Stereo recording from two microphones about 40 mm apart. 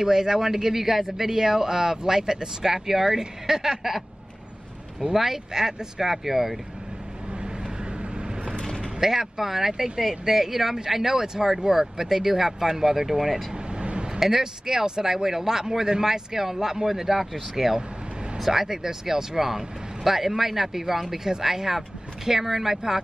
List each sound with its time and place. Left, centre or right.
0.0 s speech: centre
5.1 s speech: centre
8.5 s vehicle: centre
9.0 s speech: centre
13.5 s vehicle: right
14.2 s speech: centre